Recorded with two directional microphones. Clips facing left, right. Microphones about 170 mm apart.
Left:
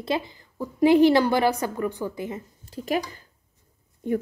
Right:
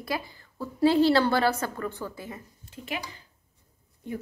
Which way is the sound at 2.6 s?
40° left (ahead or behind).